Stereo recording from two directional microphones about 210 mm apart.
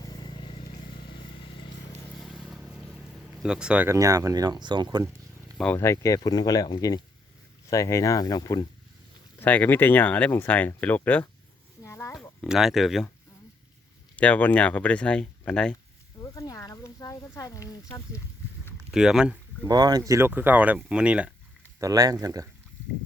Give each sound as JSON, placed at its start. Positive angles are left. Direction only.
{"t": 0.0, "sound": "vehicle", "side_deg": 20}
{"t": 0.7, "sound": "vehicle", "side_deg": 50}
{"t": 2.2, "sound": "vehicle", "side_deg": 0}
{"t": 3.4, "sound": "speech", "side_deg": -5}
{"t": 5.5, "sound": "speech", "side_deg": 10}
{"t": 11.8, "sound": "oink", "side_deg": 15}
{"t": 12.4, "sound": "speech", "side_deg": 0}
{"t": 14.2, "sound": "speech", "side_deg": 5}
{"t": 16.2, "sound": "a sound", "side_deg": 15}
{"t": 18.6, "sound": "a sound", "side_deg": -5}
{"t": 19.6, "sound": "speech", "side_deg": -20}
{"t": 21.8, "sound": "speech", "side_deg": -15}